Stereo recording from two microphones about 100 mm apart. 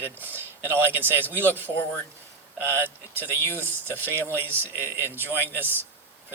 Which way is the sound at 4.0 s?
25° right (ahead or behind).